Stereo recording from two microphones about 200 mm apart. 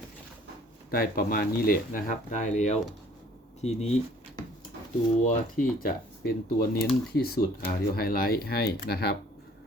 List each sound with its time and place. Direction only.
0.9 s speech: 50° left (ahead or behind)
5.2 s speech: 40° left (ahead or behind)